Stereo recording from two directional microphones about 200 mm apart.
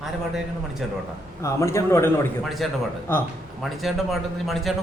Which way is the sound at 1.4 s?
15° left (ahead or behind).